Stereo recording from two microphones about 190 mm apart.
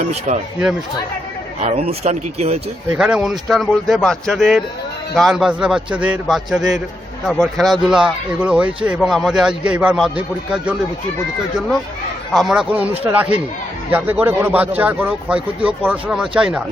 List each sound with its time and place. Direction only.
0.3 s speech: 40° right (ahead or behind)
1.5 s speech: 35° right (ahead or behind)
2.9 s speech: 5° right (ahead or behind)
12.3 s speech: centre (ahead or behind)